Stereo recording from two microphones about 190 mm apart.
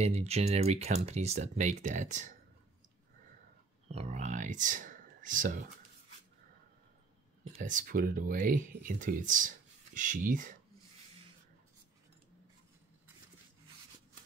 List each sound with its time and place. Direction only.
0.0 s speech: 35° right (ahead or behind)
3.9 s speech: 35° right (ahead or behind)
7.5 s speech: 45° right (ahead or behind)